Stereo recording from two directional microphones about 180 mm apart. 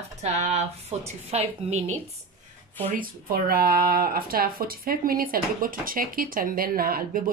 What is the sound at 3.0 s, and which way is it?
Speech, 55° right (ahead or behind).